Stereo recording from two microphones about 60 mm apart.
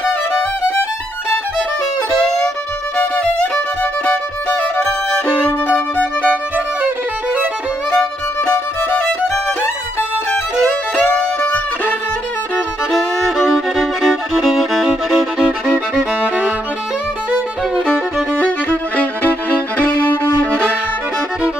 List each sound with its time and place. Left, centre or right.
3.5 s violin: left
7.9 s music: left
11.0 s music: left
13.4 s violin: centre
14.9 s music: centre
17.7 s music: centre
18.4 s violin: left